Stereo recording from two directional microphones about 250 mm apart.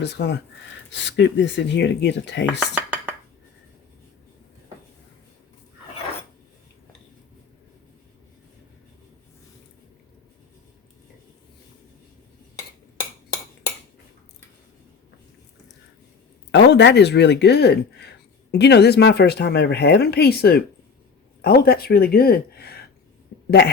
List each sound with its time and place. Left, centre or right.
0.0 s speech: left
2.5 s dishes: centre
16.5 s speech: left
23.3 s a sound: left